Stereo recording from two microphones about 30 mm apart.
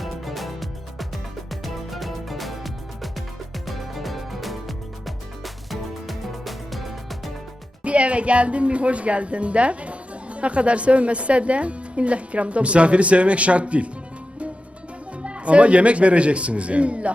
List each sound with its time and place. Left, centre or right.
0.0 s music: centre
7.9 s a woman's voice: right
15.2 s a woman's voice: right